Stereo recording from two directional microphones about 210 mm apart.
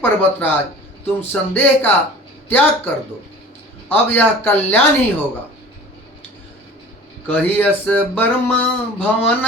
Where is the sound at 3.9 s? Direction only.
10° left (ahead or behind).